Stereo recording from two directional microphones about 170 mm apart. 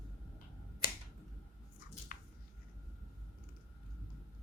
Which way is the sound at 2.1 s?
55° left (ahead or behind).